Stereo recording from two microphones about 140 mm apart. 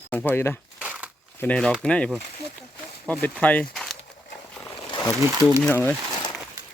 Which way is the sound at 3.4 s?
10° left (ahead or behind).